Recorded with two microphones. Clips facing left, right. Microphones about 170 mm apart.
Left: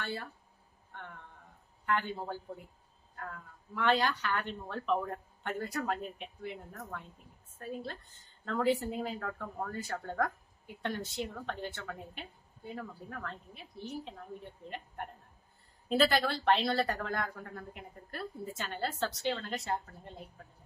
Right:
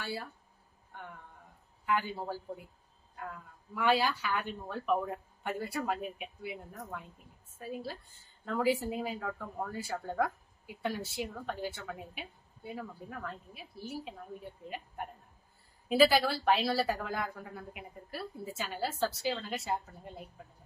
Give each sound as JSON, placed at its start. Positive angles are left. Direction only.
{"t": 0.0, "sound": "a woman's voice", "side_deg": -5}